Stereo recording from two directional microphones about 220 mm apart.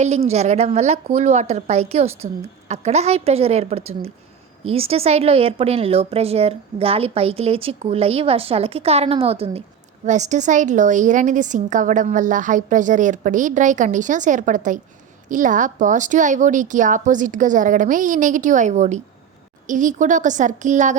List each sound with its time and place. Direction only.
0.0 s a woman's voice: 30° right (ahead or behind)